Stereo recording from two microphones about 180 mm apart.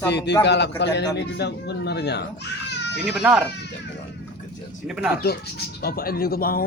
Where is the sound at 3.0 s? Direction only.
10° right (ahead or behind).